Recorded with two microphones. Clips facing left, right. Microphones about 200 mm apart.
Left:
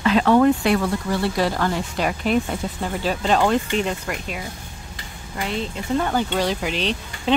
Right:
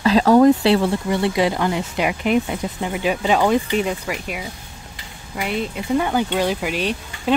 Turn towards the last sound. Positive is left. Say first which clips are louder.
# right 1 dB
turn(degrees=-10)  # may be behind; listen again after turning